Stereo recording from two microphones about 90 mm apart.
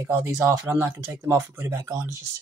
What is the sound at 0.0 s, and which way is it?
Speech, 35° right (ahead or behind).